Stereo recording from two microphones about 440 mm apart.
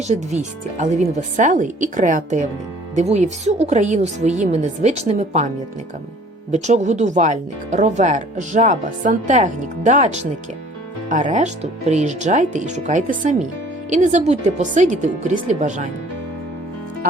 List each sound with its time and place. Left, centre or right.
0.1 s speech: centre
6.5 s speech: centre